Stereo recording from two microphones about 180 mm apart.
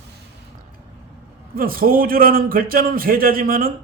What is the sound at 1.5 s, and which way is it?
A man's voice, 55° right (ahead or behind).